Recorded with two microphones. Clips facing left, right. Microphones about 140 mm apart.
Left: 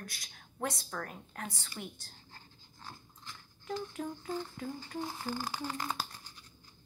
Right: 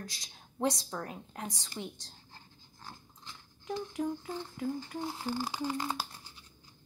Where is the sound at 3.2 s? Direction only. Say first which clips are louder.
Even; 15° right (ahead or behind).